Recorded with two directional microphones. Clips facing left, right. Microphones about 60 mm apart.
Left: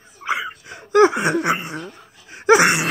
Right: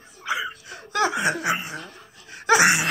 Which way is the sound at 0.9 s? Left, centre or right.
Left.